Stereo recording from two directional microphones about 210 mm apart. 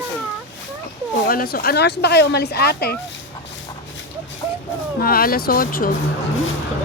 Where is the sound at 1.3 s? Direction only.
45° left (ahead or behind).